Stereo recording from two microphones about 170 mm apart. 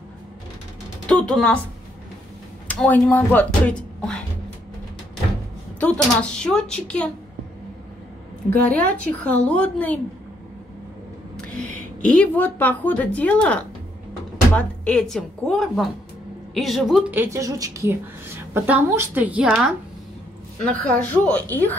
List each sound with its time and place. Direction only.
1.0 s speech: 5° left (ahead or behind)
2.7 s speech: 10° left (ahead or behind)
5.8 s speech: 5° left (ahead or behind)
8.5 s speech: 10° left (ahead or behind)
11.3 s speech: 5° left (ahead or behind)
17.1 s a woman's voice: 15° right (ahead or behind)
20.9 s speech: 10° left (ahead or behind)